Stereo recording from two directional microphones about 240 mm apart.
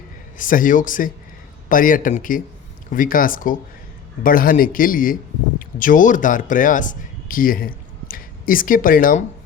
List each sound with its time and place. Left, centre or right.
0.3 s speech: left